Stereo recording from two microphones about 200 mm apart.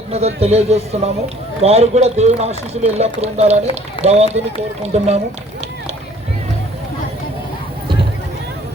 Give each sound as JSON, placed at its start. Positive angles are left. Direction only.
{"t": 0.1, "sound": "speech", "side_deg": -30}